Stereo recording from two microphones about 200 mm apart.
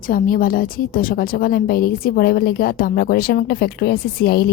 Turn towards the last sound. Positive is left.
turn(degrees=50)  # may be behind; listen again after turning